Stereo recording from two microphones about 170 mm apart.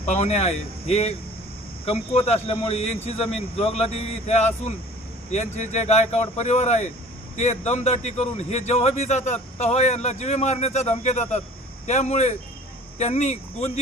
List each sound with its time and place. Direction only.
0.0 s a man's voice: 40° left (ahead or behind)